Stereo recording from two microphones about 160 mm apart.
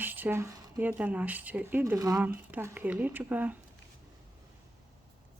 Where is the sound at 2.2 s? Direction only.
10° right (ahead or behind).